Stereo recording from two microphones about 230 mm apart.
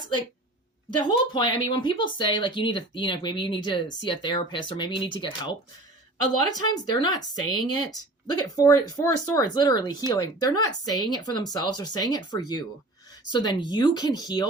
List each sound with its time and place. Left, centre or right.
1.0 s a woman's voice: left